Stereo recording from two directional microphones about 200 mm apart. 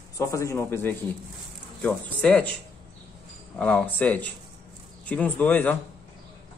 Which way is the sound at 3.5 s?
5° left (ahead or behind).